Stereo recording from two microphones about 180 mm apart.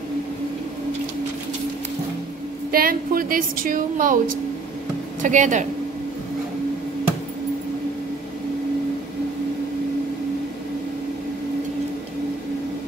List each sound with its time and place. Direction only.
2.7 s a woman's voice: 55° right (ahead or behind)